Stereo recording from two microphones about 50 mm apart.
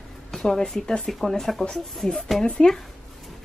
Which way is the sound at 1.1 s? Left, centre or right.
Centre.